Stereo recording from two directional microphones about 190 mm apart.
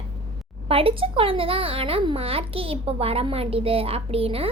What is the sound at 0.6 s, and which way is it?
A child's voice, 30° right (ahead or behind).